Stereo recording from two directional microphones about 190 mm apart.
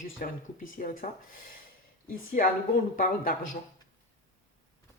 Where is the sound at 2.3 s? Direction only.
50° left (ahead or behind).